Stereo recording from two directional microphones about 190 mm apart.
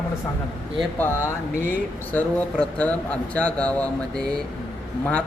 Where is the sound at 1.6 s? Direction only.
10° left (ahead or behind).